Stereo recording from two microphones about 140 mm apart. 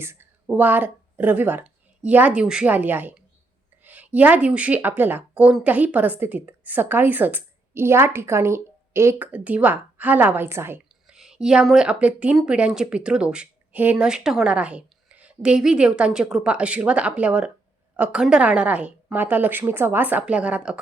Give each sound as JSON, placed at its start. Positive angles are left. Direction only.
{"t": 0.0, "sound": "a woman's voice", "side_deg": -15}